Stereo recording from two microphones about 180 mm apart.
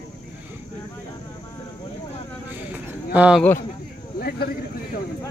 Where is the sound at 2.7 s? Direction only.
10° right (ahead or behind).